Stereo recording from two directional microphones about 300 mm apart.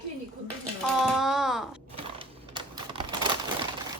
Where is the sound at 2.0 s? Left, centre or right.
Centre.